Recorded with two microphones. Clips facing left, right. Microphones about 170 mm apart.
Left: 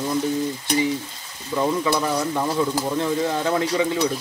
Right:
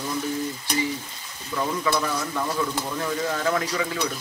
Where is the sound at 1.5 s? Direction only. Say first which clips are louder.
Left 5 dB; 25° left (ahead or behind).